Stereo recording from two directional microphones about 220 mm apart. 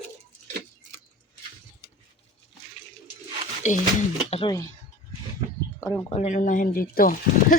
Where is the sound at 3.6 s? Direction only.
35° left (ahead or behind).